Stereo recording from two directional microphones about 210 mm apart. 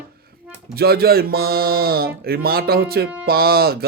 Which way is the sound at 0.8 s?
45° right (ahead or behind).